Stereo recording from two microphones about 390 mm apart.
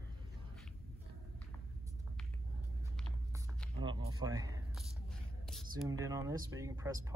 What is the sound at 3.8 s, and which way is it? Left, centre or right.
Speech, centre.